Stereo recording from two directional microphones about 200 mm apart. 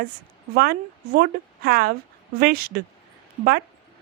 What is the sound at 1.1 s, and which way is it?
A woman's voice, 45° right (ahead or behind).